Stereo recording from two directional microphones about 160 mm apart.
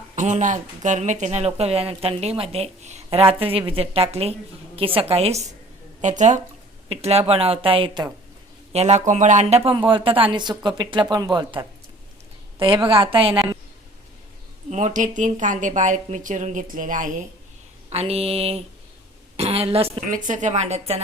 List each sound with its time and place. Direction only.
0.2 s a woman's voice: 50° right (ahead or behind); by 13.6 s 30° right (ahead or behind)
14.7 s a woman's voice: 45° right (ahead or behind)
17.8 s speech: 40° right (ahead or behind)
20.1 s a woman's voice: 55° right (ahead or behind)